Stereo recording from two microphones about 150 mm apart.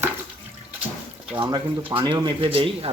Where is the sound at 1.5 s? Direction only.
30° right (ahead or behind).